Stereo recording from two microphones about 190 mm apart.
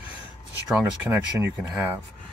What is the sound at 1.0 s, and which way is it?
Speech, 10° right (ahead or behind).